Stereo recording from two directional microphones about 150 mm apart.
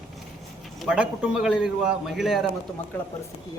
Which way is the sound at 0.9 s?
5° right (ahead or behind).